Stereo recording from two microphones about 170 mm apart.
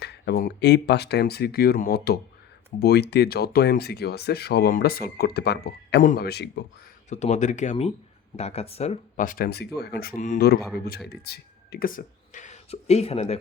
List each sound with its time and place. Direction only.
0.0 s speech: 75° left (ahead or behind)
6.0 s speech: 60° left (ahead or behind); by 6.7 s 75° left (ahead or behind)
7.1 s speech: 45° left (ahead or behind)
11.1 s speech: 70° left (ahead or behind); by 13.4 s 35° left (ahead or behind)